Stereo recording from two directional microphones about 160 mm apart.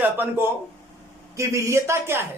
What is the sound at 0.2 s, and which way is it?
Speech, 15° right (ahead or behind).